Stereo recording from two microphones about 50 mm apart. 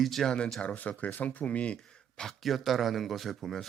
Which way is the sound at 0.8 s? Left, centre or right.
Left.